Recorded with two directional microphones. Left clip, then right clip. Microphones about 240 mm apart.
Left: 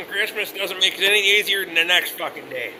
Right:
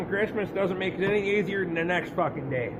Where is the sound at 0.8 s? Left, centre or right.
Right.